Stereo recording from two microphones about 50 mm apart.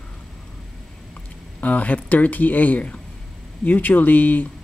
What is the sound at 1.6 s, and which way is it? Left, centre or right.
Speech, left.